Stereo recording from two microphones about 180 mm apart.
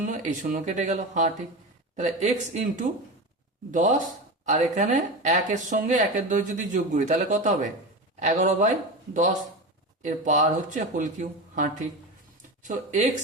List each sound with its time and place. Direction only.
0.0 s speech: 45° right (ahead or behind)